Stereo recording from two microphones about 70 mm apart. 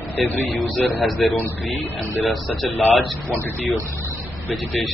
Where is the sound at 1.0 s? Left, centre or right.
Centre.